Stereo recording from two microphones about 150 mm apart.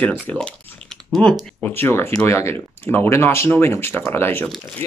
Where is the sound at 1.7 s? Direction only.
15° left (ahead or behind).